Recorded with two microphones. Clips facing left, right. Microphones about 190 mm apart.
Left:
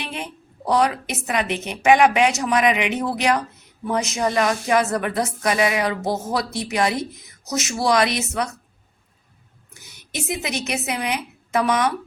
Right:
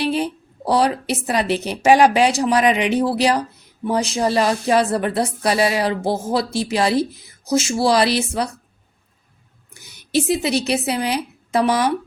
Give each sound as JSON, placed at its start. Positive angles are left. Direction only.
{"t": 0.0, "sound": "a woman's voice", "side_deg": -35}
{"t": 9.8, "sound": "a woman's voice", "side_deg": -35}